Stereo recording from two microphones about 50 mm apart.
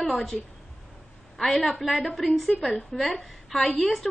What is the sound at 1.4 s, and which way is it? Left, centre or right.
A woman's voice, centre.